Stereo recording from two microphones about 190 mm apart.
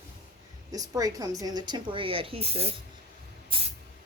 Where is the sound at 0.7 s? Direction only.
20° right (ahead or behind).